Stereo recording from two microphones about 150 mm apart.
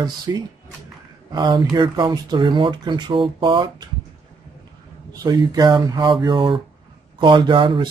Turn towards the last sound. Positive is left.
turn(degrees=-30)  # may be behind; listen again after turning